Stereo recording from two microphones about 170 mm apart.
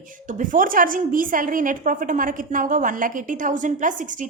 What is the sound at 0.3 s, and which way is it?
A woman's voice, 50° right (ahead or behind).